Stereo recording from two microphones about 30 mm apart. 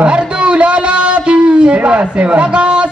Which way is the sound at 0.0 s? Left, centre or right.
Right.